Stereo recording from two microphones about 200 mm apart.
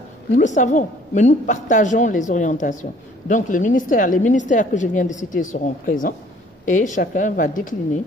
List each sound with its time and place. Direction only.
0.4 s a woman's voice: 35° left (ahead or behind)